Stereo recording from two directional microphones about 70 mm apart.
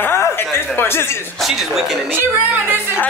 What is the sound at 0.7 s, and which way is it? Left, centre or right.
Speech, left.